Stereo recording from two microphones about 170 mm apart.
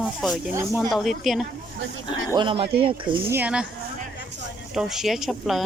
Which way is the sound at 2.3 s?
30° right (ahead or behind).